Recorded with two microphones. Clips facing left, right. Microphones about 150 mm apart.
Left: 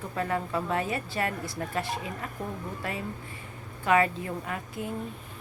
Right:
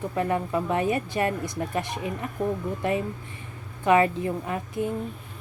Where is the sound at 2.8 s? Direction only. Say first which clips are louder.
Right 9 dB; 20° right (ahead or behind).